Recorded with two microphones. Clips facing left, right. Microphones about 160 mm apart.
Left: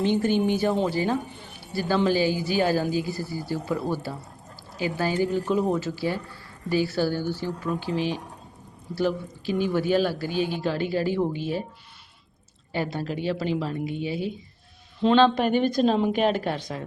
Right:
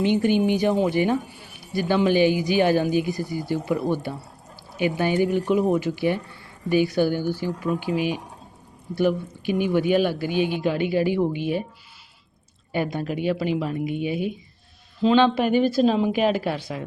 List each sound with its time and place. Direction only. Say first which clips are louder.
0.0 s speech: right 2 dB; 15° right (ahead or behind)
12.7 s speech: right 3 dB; 15° right (ahead or behind)